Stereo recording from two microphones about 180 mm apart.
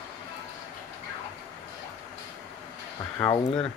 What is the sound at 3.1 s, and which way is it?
Speech, 10° left (ahead or behind).